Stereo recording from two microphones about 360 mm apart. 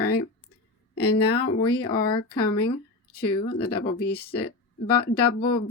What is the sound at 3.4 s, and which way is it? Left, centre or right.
Speech, left.